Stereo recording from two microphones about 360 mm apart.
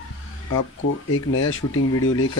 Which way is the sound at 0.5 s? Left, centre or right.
Left.